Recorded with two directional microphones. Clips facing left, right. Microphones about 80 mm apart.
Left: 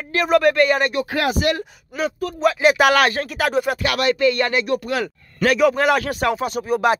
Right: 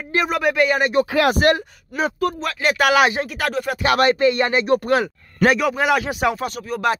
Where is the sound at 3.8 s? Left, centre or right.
Right.